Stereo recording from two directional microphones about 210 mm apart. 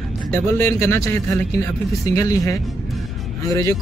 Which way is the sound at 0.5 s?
10° left (ahead or behind).